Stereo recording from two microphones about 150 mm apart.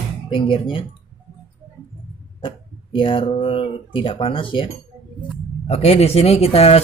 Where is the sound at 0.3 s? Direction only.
35° left (ahead or behind).